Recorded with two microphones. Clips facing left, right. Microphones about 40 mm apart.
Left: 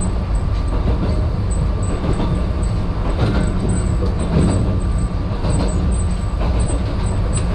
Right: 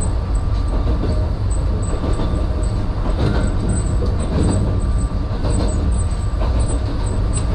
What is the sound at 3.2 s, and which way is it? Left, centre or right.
Vehicle, centre.